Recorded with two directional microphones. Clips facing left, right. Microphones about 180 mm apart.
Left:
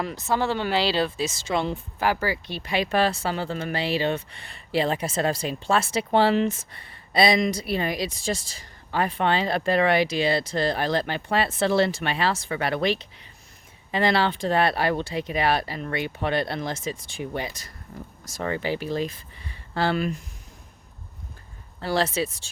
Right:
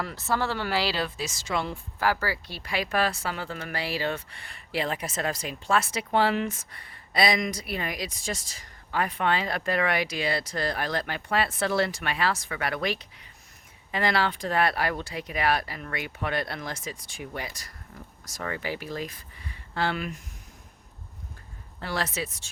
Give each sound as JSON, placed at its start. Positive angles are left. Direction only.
{"t": 0.0, "sound": "speech", "side_deg": 20}
{"t": 21.8, "sound": "speech", "side_deg": 30}